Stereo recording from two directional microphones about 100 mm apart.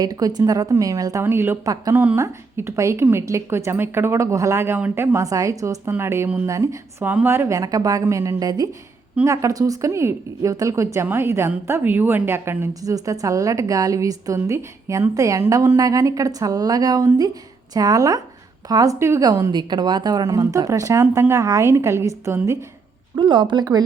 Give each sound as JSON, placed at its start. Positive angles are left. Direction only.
{"t": 0.0, "sound": "a woman's voice", "side_deg": -40}
{"t": 1.2, "sound": "a woman's voice", "side_deg": -20}
{"t": 1.6, "sound": "a woman's voice", "side_deg": -35}
{"t": 5.2, "sound": "a woman's voice", "side_deg": -35}
{"t": 6.4, "sound": "a woman's voice", "side_deg": -35}
{"t": 7.0, "sound": "a woman's voice", "side_deg": -20}
{"t": 12.8, "sound": "a woman's voice", "side_deg": -35}
{"t": 18.9, "sound": "a woman's voice", "side_deg": -25}
{"t": 19.2, "sound": "a woman's voice", "side_deg": -40}
{"t": 23.1, "sound": "speech", "side_deg": -50}